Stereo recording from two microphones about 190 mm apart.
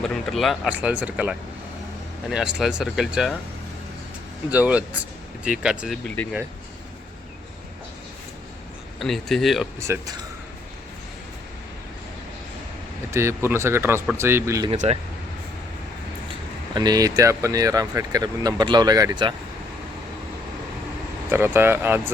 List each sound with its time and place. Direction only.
0.0 s speech: centre (ahead or behind)
2.6 s speech: 5° right (ahead or behind)
4.5 s speech: 5° right (ahead or behind)
9.0 s speech: centre (ahead or behind)
9.8 s speech: 15° right (ahead or behind)
13.1 s speech: 15° right (ahead or behind)
14.7 s speech: 35° right (ahead or behind)
16.7 s speech: 20° right (ahead or behind)
21.2 s speech: 10° right (ahead or behind)